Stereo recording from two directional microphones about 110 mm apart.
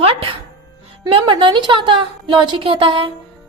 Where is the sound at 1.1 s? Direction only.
50° right (ahead or behind).